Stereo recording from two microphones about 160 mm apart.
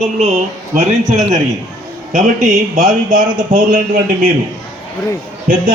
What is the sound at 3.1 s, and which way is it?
A man's voice, 55° right (ahead or behind).